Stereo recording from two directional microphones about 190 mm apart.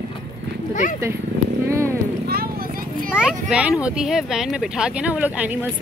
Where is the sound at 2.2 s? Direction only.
50° right (ahead or behind).